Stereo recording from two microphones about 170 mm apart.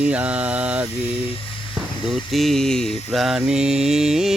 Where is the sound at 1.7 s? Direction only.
Centre (ahead or behind).